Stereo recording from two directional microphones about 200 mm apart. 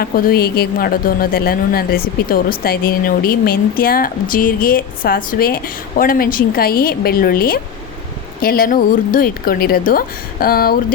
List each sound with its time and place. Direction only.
0.0 s speech: 50° left (ahead or behind)